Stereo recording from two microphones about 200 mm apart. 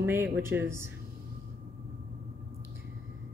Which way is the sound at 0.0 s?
10° right (ahead or behind).